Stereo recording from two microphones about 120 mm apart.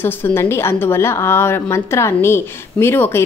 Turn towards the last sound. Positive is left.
turn(degrees=20)  # may be behind; listen again after turning